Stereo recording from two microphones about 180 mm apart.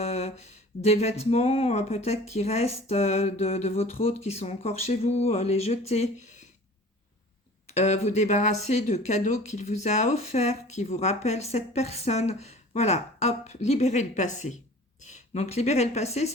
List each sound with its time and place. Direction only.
0.0 s speech: 35° left (ahead or behind)
7.7 s speech: 35° left (ahead or behind)